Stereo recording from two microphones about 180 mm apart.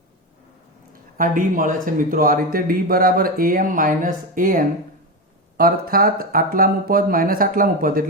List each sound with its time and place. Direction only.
1.2 s speech: 50° right (ahead or behind)